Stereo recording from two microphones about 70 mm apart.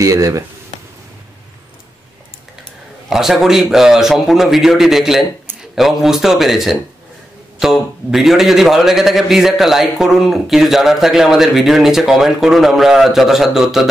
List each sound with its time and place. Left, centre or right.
0.0 s speech: right
3.1 s a man's voice: centre